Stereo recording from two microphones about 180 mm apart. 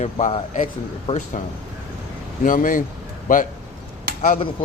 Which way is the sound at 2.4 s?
45° left (ahead or behind).